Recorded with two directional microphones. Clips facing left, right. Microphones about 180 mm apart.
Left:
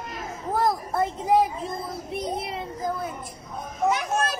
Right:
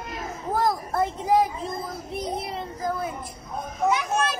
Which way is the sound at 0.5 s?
Centre (ahead or behind).